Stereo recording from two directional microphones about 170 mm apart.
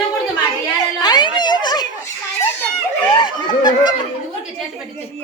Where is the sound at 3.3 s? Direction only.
25° left (ahead or behind).